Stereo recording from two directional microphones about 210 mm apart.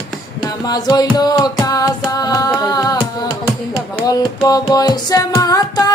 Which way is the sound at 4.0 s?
15° left (ahead or behind).